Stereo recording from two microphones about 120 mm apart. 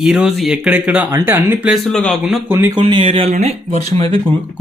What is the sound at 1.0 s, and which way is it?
Speech, 20° right (ahead or behind).